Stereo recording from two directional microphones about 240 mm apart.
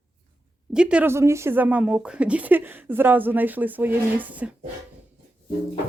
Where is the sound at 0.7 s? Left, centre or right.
Centre.